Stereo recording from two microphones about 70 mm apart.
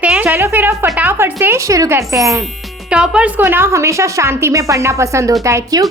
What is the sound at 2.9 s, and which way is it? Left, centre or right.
Speech, centre.